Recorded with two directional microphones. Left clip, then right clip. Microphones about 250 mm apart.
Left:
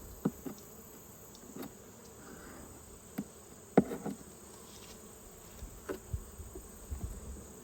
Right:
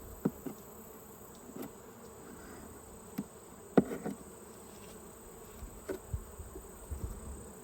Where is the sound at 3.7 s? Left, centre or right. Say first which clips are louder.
Even; centre.